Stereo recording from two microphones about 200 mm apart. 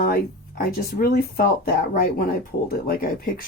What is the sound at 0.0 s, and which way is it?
Speech, 50° left (ahead or behind).